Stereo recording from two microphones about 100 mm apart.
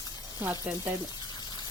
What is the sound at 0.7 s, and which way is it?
Speech, 10° right (ahead or behind).